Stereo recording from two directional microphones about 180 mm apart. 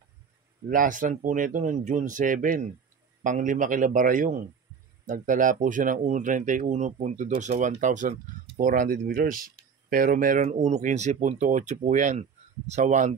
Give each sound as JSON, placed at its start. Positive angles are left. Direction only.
{"t": 0.7, "sound": "speech", "side_deg": -50}